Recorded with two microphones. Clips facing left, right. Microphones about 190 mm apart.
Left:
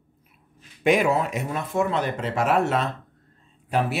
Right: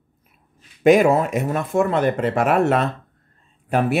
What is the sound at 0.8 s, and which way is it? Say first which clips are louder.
Speech: right 6 dB; 45° right (ahead or behind).